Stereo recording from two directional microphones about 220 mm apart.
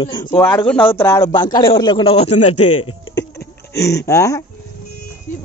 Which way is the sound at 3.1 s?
55° left (ahead or behind).